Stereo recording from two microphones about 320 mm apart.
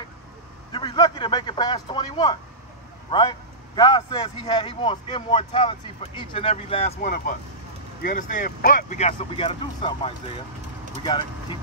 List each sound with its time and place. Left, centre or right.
0.7 s speech: centre